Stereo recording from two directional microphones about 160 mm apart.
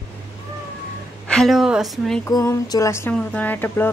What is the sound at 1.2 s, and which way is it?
A woman's voice, 5° left (ahead or behind).